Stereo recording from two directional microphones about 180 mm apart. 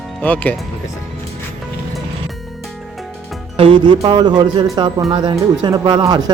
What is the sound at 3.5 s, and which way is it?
Speech, 30° right (ahead or behind).